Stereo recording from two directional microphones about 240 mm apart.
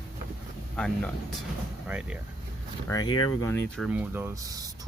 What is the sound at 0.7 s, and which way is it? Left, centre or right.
Speech, centre.